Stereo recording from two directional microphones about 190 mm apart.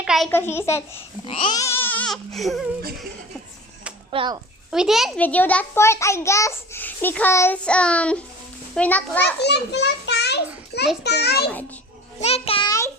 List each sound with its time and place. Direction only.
0.0 s toothbrush: 5° right (ahead or behind)
0.3 s a child's voice: 10° left (ahead or behind)
1.2 s a child's voice: 30° left (ahead or behind); by 2.6 s centre (ahead or behind)
4.1 s a child's voice: 25° right (ahead or behind)
4.7 s a child's voice: centre (ahead or behind)
9.4 s a child's voice: 60° left (ahead or behind)
12.2 s a child's voice: 30° left (ahead or behind)